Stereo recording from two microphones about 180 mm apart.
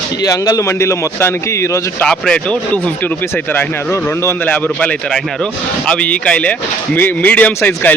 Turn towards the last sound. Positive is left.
turn(degrees=10)  # may be behind; listen again after turning